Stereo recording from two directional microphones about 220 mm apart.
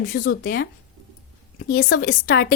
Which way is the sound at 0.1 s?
45° left (ahead or behind).